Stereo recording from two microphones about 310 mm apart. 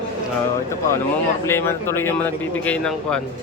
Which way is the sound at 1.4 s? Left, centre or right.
Centre.